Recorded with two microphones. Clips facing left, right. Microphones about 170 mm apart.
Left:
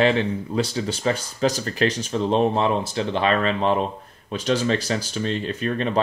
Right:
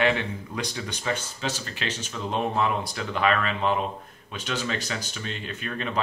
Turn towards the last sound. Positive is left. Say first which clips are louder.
# left 8 dB
turn(degrees=35)  # may be behind; listen again after turning